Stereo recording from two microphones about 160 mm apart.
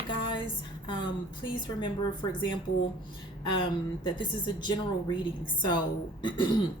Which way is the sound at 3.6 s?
30° left (ahead or behind).